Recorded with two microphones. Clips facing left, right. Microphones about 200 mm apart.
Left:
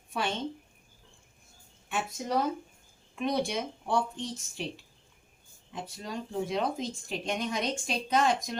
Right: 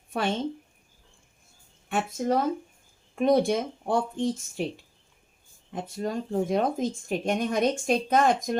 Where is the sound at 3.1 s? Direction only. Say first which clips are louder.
Right 8 dB; 50° right (ahead or behind).